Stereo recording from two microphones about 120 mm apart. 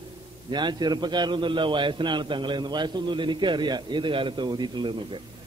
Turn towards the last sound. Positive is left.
turn(degrees=-40)  # may be behind; listen again after turning